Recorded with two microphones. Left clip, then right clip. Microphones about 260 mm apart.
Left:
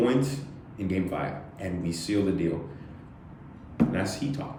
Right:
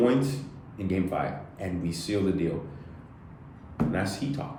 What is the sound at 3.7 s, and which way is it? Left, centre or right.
Speech, centre.